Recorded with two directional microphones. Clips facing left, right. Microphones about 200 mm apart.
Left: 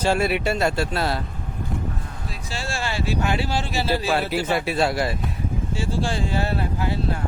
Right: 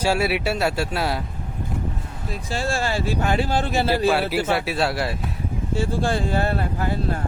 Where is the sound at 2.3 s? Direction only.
50° right (ahead or behind).